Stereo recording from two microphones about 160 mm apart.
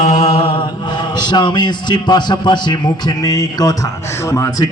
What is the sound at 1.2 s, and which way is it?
Speech, 30° left (ahead or behind).